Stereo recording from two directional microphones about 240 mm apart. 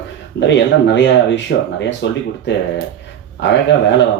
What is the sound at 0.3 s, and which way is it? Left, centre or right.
Speech, left.